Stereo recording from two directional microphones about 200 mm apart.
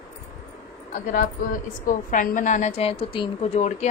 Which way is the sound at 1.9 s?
40° left (ahead or behind).